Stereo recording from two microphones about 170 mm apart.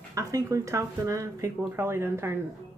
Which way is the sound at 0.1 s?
20° right (ahead or behind).